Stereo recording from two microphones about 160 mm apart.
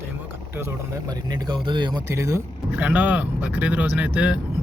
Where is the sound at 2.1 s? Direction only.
20° right (ahead or behind).